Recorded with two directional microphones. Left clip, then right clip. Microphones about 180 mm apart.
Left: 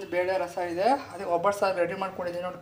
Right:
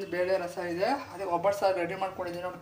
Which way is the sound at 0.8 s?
20° left (ahead or behind).